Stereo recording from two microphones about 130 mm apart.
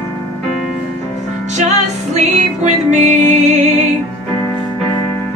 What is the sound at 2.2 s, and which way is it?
Music, 60° right (ahead or behind).